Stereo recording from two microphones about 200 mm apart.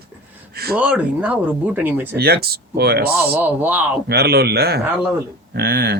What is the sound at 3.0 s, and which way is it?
Speech, 10° right (ahead or behind).